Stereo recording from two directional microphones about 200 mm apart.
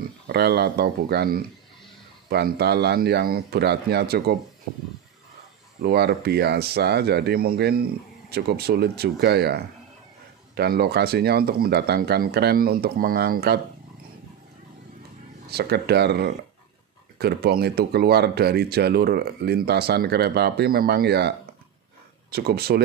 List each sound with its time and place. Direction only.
0.3 s speech: 55° right (ahead or behind)
5.8 s speech: 55° right (ahead or behind)
15.5 s speech: 55° right (ahead or behind)
22.3 s speech: 50° right (ahead or behind)